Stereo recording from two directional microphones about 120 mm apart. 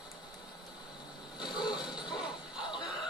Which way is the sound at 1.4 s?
35° left (ahead or behind).